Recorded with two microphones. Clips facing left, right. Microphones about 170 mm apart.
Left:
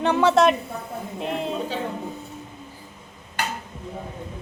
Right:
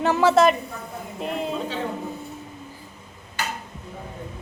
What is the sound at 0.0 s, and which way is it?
A woman's voice, centre (ahead or behind).